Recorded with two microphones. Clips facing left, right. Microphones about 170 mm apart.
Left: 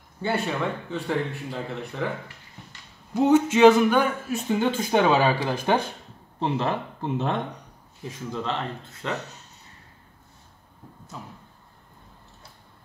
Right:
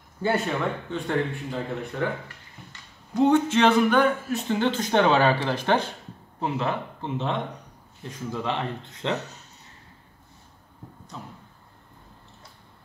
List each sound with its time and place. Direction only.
0.2 s speech: centre (ahead or behind)
3.2 s speech: 5° left (ahead or behind)
6.4 s speech: 35° left (ahead or behind)
8.3 s speech: 15° right (ahead or behind)